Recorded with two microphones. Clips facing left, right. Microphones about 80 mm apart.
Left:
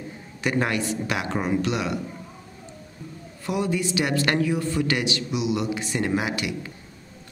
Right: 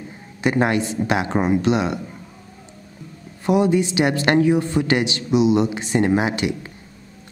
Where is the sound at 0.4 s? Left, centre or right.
Right.